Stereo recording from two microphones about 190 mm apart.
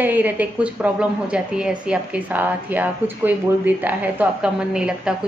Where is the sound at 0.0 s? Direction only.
10° right (ahead or behind).